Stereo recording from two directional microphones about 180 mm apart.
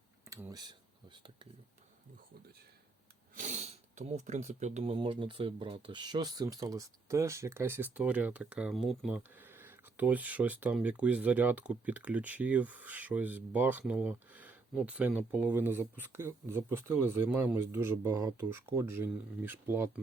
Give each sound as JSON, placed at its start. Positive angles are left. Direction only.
{"t": 0.3, "sound": "a sound", "side_deg": -10}
{"t": 0.5, "sound": "speech", "side_deg": -20}
{"t": 3.3, "sound": "speech", "side_deg": -40}